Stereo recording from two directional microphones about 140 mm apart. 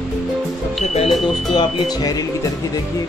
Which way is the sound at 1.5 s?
30° left (ahead or behind).